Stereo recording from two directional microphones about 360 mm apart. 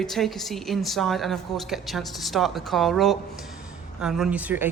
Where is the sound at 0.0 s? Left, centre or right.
Centre.